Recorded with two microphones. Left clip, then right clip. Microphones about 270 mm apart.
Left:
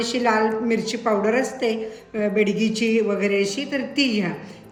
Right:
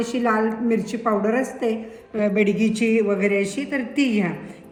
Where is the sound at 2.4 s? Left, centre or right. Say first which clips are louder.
Right 1 dB; left.